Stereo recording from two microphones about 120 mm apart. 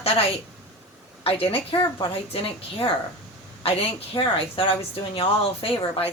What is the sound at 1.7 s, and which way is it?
A woman's voice, 45° left (ahead or behind).